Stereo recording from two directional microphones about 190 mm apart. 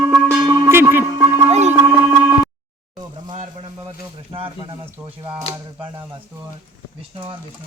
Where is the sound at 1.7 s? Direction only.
10° right (ahead or behind).